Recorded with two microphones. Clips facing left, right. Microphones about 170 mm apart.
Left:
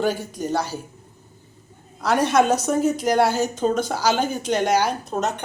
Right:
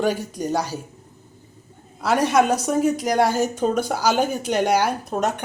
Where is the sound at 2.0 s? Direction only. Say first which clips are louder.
Even; 5° right (ahead or behind).